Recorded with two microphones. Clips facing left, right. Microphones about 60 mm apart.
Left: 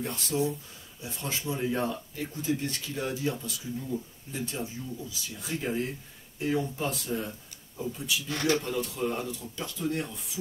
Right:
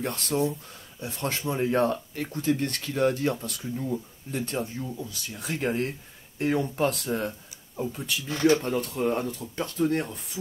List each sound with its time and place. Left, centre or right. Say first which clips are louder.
0.0 s speech: right 3 dB; right